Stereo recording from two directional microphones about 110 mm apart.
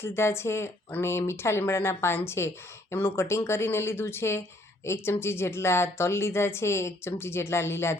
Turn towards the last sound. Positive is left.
turn(degrees=25)  # may be behind; listen again after turning